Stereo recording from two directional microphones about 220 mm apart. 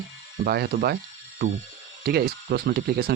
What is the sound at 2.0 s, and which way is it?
Speech, 45° right (ahead or behind).